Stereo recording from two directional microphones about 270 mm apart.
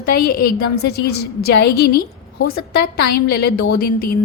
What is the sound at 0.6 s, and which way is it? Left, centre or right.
A woman's voice, left.